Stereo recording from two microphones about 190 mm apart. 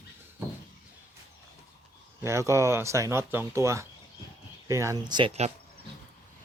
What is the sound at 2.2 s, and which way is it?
Speech, 15° right (ahead or behind).